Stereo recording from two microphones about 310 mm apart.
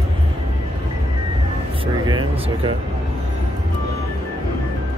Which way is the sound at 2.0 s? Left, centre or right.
Centre.